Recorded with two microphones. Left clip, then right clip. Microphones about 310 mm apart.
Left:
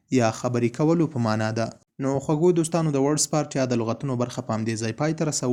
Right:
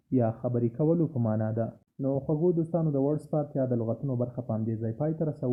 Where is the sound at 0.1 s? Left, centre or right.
Left.